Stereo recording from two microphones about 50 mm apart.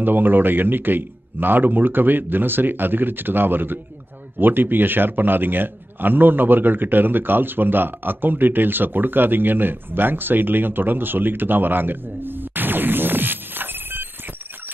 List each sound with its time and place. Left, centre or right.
0.0 s a man's voice: right